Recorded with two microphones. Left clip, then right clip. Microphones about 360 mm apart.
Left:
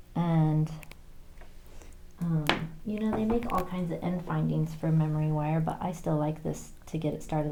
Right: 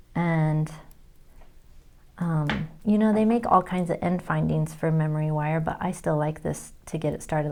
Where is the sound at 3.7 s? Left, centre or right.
Right.